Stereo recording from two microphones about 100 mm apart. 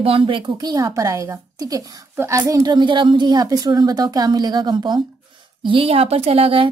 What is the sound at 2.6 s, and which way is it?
A woman's voice, 50° right (ahead or behind).